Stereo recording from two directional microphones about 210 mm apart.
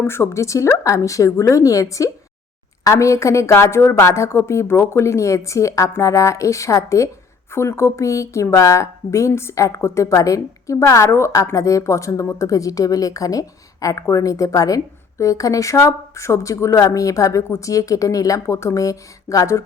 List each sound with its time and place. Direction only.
0.0 s a woman's voice: 10° left (ahead or behind)